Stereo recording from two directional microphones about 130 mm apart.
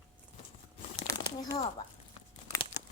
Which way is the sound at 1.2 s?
30° left (ahead or behind).